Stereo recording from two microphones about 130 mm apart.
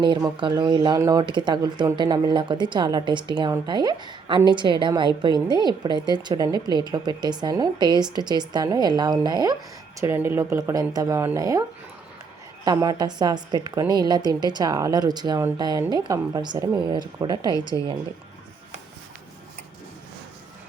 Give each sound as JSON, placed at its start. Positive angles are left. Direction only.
{"t": 0.3, "sound": "speech", "side_deg": -35}
{"t": 10.0, "sound": "speech", "side_deg": -20}
{"t": 12.6, "sound": "speech", "side_deg": -30}